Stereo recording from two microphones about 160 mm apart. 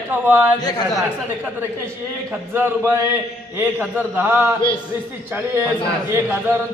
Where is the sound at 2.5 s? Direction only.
15° right (ahead or behind).